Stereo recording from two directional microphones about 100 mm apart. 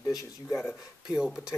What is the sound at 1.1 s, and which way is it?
Speech, 5° right (ahead or behind).